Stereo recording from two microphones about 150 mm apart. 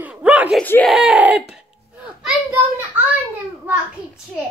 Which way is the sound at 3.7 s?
10° right (ahead or behind).